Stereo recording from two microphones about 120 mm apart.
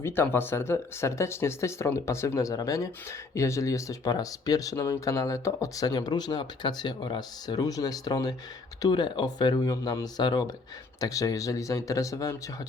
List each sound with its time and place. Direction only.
0.0 s speech: 20° left (ahead or behind)